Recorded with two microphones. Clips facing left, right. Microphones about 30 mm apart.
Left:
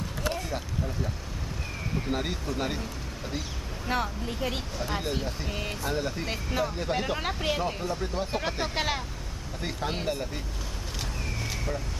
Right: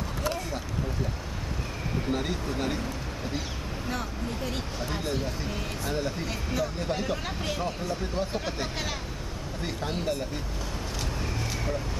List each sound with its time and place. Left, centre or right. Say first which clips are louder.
2.0 s speech: right 2 dB; centre
3.9 s speech: left 5 dB; left
4.8 s speech: even; centre
7.9 s speech: even; centre
8.3 s speech: left 2 dB; centre
9.6 s speech: left 1 dB; centre